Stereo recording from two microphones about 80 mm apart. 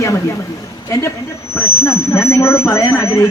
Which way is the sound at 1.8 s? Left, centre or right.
Left.